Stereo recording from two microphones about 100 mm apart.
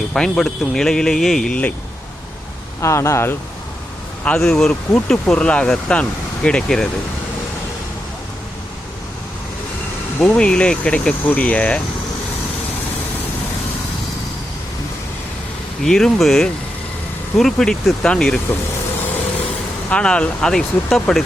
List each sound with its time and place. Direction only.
0.1 s speech: 5° left (ahead or behind)
2.8 s speech: 30° left (ahead or behind)
4.2 s speech: 10° left (ahead or behind)
10.2 s speech: 10° left (ahead or behind)
15.8 s speech: 5° left (ahead or behind)
19.9 s speech: 10° left (ahead or behind)